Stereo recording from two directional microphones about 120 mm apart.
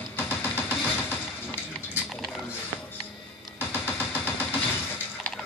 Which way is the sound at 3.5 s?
15° left (ahead or behind).